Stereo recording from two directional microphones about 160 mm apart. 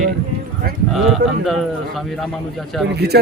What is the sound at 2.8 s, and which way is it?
Speech, 90° right.